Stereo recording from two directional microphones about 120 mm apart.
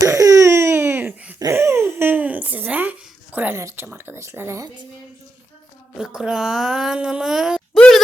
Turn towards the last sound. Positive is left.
turn(degrees=5)  # may be behind; listen again after turning